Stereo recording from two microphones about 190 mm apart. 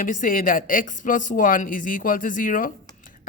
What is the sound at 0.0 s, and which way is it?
A man's voice, 45° left (ahead or behind).